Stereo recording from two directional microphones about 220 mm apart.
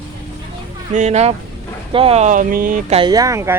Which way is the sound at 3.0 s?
15° right (ahead or behind).